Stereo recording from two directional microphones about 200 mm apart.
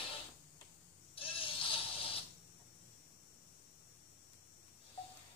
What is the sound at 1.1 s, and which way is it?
Bleat, 25° left (ahead or behind).